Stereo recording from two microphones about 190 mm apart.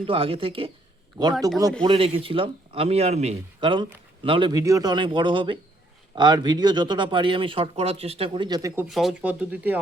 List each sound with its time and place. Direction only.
0.0 s speech: 30° right (ahead or behind)
8.9 s speech: centre (ahead or behind)